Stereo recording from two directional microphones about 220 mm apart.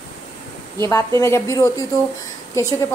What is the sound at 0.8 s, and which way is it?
A woman's voice, 10° left (ahead or behind).